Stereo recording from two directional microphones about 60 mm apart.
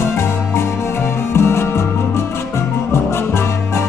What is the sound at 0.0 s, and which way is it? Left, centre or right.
Music, left.